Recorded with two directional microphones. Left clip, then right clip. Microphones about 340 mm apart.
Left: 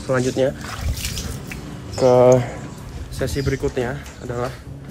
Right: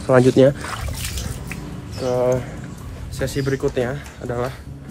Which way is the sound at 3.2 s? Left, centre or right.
Centre.